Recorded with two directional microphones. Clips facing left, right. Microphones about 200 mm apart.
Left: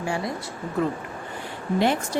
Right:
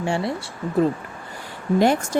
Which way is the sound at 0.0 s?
30° right (ahead or behind).